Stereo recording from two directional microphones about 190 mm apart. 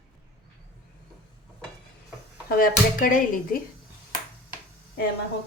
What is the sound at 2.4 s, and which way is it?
Speech, 50° left (ahead or behind).